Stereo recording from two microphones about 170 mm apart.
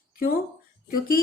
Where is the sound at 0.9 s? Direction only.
60° left (ahead or behind).